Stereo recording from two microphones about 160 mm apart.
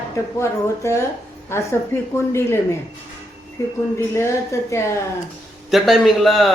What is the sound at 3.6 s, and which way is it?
A woman's voice, 20° left (ahead or behind).